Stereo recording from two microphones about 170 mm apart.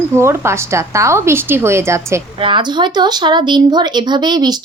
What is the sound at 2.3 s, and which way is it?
Speech, 30° right (ahead or behind).